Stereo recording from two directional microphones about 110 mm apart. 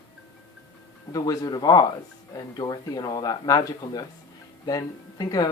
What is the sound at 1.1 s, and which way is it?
Speech, 35° left (ahead or behind).